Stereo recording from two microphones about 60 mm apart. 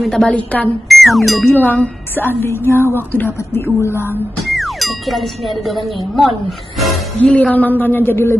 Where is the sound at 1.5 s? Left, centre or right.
Left.